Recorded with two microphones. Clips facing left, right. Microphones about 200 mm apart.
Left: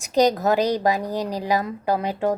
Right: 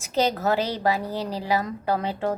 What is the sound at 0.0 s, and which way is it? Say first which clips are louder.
A woman's voice: left 5 dB; 15° left (ahead or behind).